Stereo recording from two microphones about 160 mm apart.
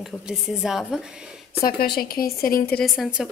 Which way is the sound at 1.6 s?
70° left (ahead or behind).